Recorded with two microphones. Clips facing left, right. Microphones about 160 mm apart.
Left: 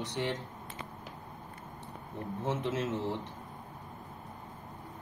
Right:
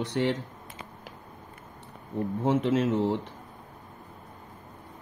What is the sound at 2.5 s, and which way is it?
Speech, 75° right (ahead or behind).